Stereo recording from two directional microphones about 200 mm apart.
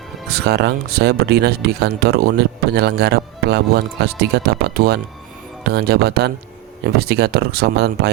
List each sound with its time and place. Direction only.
0.3 s speech: 55° right (ahead or behind)